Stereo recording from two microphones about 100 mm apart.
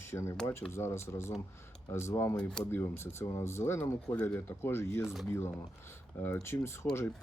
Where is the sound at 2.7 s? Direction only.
25° left (ahead or behind).